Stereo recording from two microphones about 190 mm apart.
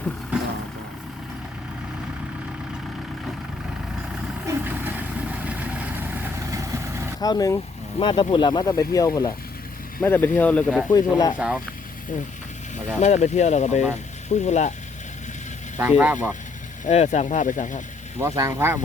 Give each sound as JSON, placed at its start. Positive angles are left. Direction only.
{"t": 4.4, "sound": "vehicle", "side_deg": -10}
{"t": 7.2, "sound": "speech", "side_deg": 20}
{"t": 10.9, "sound": "speech", "side_deg": 20}
{"t": 11.3, "sound": "speech", "side_deg": -5}
{"t": 13.0, "sound": "speech", "side_deg": 35}
{"t": 15.8, "sound": "speech", "side_deg": -10}
{"t": 16.8, "sound": "speech", "side_deg": 40}
{"t": 18.2, "sound": "speech", "side_deg": -15}